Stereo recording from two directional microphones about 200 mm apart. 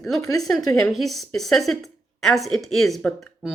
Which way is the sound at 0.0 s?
Centre (ahead or behind).